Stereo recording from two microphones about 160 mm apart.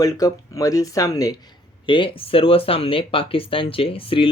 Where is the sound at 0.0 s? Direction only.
20° left (ahead or behind).